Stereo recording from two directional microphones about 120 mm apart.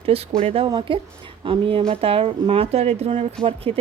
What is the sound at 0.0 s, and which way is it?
Speech, 55° right (ahead or behind).